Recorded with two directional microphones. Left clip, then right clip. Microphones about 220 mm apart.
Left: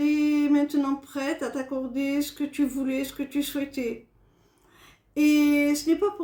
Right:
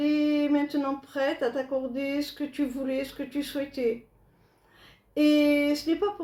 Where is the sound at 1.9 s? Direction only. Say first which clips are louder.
Left 2 dB; 55° left (ahead or behind).